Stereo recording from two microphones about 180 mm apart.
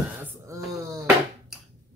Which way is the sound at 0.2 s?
15° right (ahead or behind).